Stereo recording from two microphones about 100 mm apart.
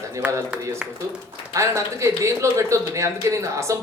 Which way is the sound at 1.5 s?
30° right (ahead or behind).